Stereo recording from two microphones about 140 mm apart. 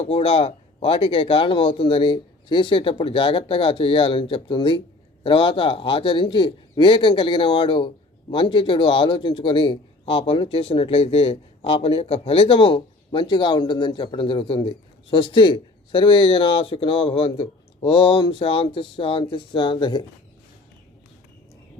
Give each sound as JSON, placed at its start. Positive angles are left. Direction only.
{"t": 0.0, "sound": "a man's voice", "side_deg": 45}